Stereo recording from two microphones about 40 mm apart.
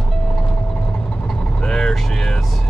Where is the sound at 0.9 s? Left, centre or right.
Left.